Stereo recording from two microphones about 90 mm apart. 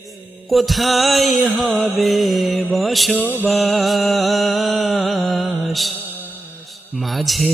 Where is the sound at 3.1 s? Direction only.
20° right (ahead or behind).